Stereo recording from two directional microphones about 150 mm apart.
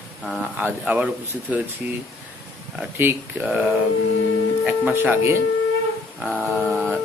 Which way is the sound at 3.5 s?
5° right (ahead or behind).